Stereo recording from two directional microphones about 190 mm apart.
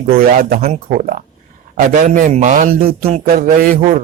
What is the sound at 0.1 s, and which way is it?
A man's voice, 45° right (ahead or behind).